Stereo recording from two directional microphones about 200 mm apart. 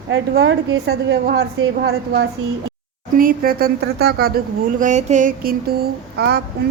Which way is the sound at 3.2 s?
45° right (ahead or behind).